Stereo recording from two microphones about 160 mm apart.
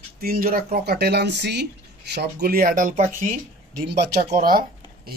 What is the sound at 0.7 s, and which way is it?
Speech, 90° right.